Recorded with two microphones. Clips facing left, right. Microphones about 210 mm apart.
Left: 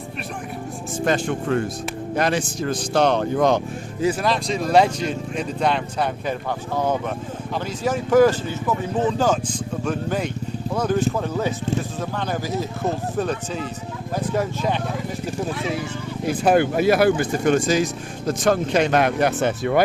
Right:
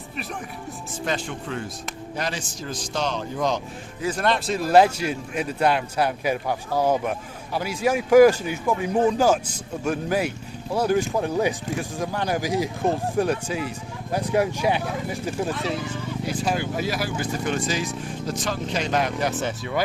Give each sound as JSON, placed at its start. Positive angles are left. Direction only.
{"t": 1.0, "sound": "speech", "side_deg": 50}
{"t": 4.2, "sound": "speech", "side_deg": 0}
{"t": 15.4, "sound": "speech", "side_deg": 0}
{"t": 16.2, "sound": "speech", "side_deg": 55}